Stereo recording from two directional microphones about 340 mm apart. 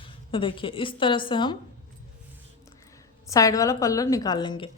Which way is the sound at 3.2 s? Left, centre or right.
Centre.